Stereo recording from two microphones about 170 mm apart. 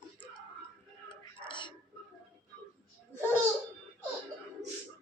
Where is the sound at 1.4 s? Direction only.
30° left (ahead or behind).